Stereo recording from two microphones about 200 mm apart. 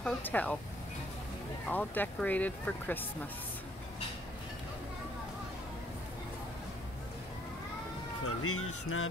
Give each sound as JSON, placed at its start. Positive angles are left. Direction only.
{"t": 0.0, "sound": "speech", "side_deg": 10}
{"t": 1.7, "sound": "speech", "side_deg": 10}
{"t": 8.2, "sound": "speech", "side_deg": 90}